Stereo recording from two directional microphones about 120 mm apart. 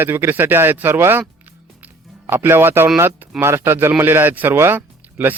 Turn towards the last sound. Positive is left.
turn(degrees=-15)  # may be behind; listen again after turning